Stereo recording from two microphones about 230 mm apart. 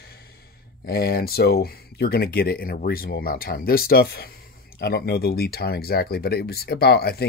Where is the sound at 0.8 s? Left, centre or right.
Left.